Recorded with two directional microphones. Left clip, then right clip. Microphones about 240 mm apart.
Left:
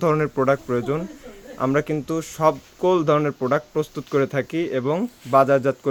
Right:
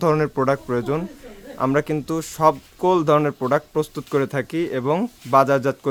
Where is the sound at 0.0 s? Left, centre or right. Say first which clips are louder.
Right 1 dB; centre.